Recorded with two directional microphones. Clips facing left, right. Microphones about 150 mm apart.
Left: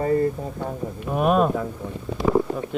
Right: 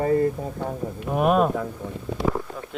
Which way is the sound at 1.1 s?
55° right (ahead or behind).